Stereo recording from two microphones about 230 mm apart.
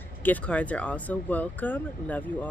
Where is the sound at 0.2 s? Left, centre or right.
Centre.